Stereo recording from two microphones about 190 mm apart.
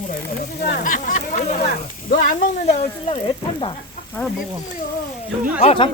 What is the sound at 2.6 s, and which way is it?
Speech, 35° left (ahead or behind).